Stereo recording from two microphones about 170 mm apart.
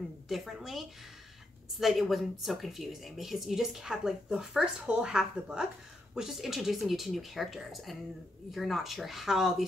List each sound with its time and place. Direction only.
0.3 s speech: centre (ahead or behind)